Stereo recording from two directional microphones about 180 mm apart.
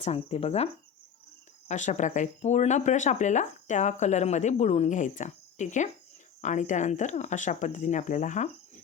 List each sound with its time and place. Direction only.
0.0 s speech: 35° left (ahead or behind)